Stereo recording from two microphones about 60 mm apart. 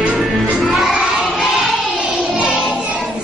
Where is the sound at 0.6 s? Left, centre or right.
Centre.